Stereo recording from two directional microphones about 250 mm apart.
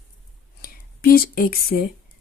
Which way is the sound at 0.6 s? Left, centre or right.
Left.